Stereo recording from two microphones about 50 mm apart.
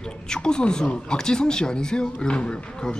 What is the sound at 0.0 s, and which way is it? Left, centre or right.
Speech, centre.